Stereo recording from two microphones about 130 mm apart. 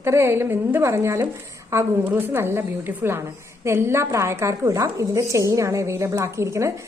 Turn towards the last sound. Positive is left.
turn(degrees=-25)  # may be behind; listen again after turning